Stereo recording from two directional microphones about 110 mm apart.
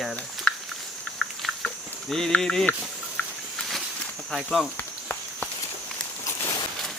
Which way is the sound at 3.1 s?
5° left (ahead or behind).